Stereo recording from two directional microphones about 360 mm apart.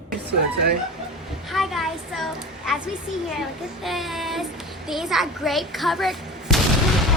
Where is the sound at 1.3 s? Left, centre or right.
Centre.